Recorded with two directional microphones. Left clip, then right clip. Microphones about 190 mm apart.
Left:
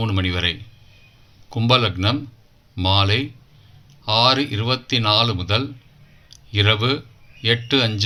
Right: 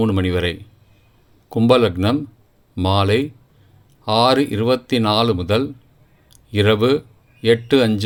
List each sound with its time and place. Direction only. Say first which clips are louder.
0.0 s speech: right 3 dB; 50° right (ahead or behind)